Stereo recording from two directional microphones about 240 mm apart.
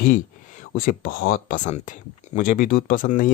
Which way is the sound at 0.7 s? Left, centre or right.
Left.